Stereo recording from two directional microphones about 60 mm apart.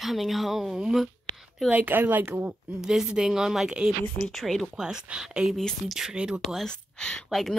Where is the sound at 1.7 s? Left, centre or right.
Right.